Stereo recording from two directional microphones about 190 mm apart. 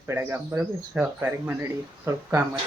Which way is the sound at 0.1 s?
10° right (ahead or behind).